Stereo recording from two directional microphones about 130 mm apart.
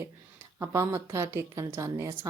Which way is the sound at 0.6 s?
20° right (ahead or behind).